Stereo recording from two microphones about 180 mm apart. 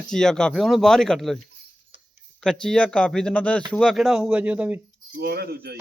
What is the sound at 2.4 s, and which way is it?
Speech, 5° left (ahead or behind).